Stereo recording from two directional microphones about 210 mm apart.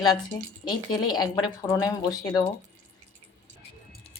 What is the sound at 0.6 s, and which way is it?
A woman's voice, 20° left (ahead or behind).